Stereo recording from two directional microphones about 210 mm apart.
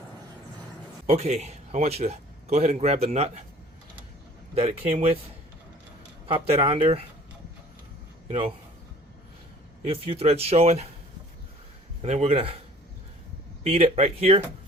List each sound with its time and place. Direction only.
1.0 s a man's voice: 30° right (ahead or behind)
4.6 s speech: 30° right (ahead or behind)
6.2 s speech: 25° right (ahead or behind)
8.3 s speech: 25° right (ahead or behind)
9.9 s speech: 30° right (ahead or behind)
12.0 s speech: 30° right (ahead or behind)
13.7 s speech: 30° right (ahead or behind)